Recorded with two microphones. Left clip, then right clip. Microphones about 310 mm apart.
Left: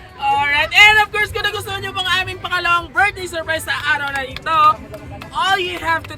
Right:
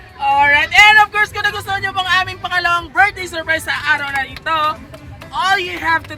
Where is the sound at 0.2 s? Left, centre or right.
Centre.